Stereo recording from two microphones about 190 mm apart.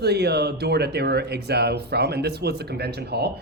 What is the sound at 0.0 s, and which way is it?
Speech, 60° right (ahead or behind).